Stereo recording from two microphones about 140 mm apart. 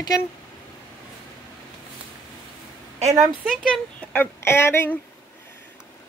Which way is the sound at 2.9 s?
50° right (ahead or behind).